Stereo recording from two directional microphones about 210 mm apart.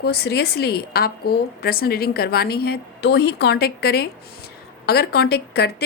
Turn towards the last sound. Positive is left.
turn(degrees=50)  # may be behind; listen again after turning